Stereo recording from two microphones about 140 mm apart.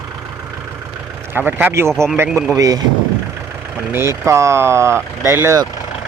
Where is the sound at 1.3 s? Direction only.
15° right (ahead or behind).